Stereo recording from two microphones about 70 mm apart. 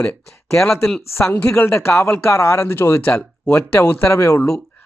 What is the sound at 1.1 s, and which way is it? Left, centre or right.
Speech, left.